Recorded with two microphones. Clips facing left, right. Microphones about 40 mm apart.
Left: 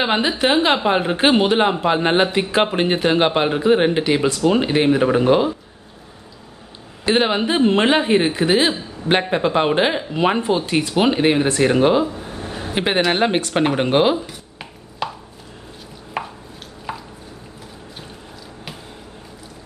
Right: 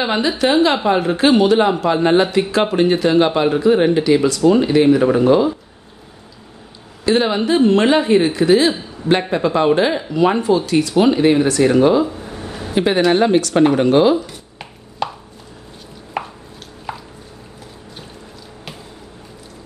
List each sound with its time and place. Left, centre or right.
0.0 s speech: left
7.1 s speech: left
14.6 s chopping: centre
16.1 s chopping: centre
16.9 s drip: centre